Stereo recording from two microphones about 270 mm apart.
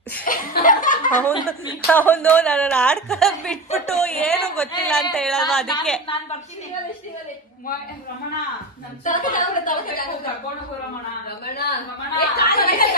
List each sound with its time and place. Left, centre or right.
0.2 s speech: left
1.9 s speech: centre
9.0 s speech: left
11.4 s speech: left